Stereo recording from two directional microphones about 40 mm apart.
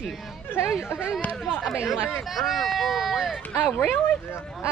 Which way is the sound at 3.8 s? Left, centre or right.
Left.